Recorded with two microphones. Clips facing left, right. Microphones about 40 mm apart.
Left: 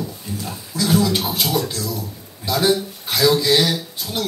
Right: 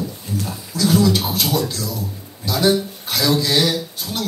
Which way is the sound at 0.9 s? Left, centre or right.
Left.